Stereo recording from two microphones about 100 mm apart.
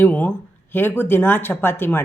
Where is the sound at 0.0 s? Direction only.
20° left (ahead or behind).